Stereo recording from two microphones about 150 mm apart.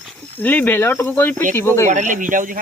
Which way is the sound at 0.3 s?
10° left (ahead or behind).